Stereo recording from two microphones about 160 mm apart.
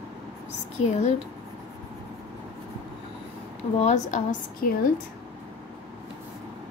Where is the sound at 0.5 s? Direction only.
45° left (ahead or behind).